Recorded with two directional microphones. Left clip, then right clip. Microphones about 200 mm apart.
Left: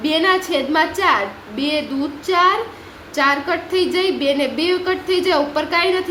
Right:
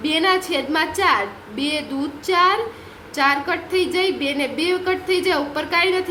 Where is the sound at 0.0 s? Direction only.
5° left (ahead or behind).